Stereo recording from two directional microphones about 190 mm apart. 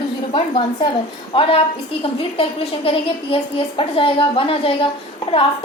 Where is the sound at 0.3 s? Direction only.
25° left (ahead or behind).